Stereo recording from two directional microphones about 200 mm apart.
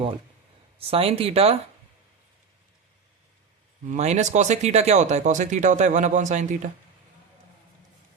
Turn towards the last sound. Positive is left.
turn(degrees=-35)  # may be behind; listen again after turning